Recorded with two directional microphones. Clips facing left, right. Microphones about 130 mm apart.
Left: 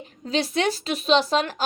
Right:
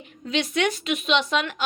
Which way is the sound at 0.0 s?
35° left (ahead or behind).